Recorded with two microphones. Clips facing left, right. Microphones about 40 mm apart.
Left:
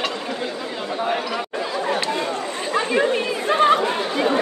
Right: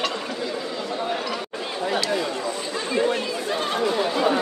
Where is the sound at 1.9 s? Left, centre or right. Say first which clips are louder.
Right 1 dB; left.